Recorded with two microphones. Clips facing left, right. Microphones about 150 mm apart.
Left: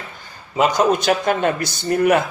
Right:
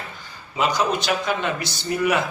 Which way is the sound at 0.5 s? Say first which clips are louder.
Left 5 dB; 50° left (ahead or behind).